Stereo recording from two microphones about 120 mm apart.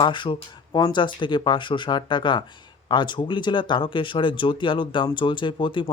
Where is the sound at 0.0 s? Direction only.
40° left (ahead or behind).